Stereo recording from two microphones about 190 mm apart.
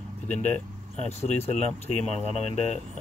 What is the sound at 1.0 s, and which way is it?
Speech, 35° left (ahead or behind).